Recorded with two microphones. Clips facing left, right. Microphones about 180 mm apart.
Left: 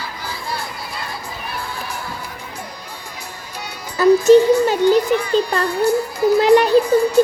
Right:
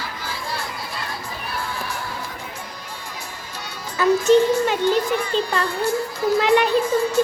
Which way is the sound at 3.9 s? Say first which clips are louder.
Left 5 dB; 40° left (ahead or behind).